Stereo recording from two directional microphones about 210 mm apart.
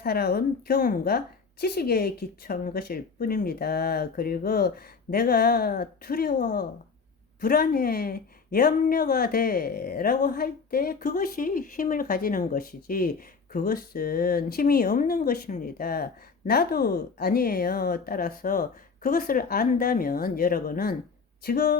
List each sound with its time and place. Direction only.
0.0 s speech: 50° left (ahead or behind)